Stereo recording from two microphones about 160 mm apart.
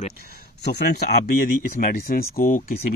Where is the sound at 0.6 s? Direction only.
90° left.